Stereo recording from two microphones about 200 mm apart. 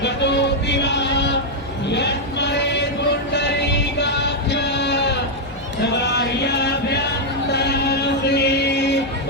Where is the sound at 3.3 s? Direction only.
60° left (ahead or behind).